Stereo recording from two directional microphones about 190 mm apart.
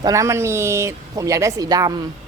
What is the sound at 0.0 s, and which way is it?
A woman's voice, 15° right (ahead or behind).